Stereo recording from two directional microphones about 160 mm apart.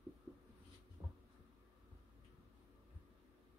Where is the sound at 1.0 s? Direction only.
25° right (ahead or behind).